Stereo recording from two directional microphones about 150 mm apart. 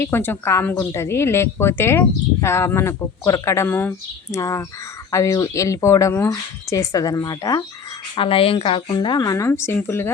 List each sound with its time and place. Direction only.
0.0 s a woman's voice: 15° left (ahead or behind)
8.1 s speech: 35° left (ahead or behind); by 10.1 s 15° left (ahead or behind)